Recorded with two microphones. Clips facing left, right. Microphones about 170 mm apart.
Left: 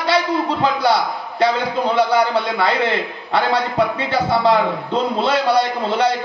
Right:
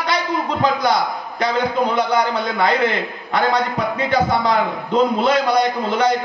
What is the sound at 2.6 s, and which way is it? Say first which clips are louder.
A man's voice: right 1 dB; 30° left (ahead or behind).